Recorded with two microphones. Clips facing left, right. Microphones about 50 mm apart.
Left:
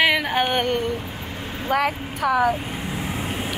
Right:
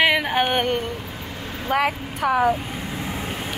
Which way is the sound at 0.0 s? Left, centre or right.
Centre.